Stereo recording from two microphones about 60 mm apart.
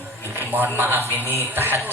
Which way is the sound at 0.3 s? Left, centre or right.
Right.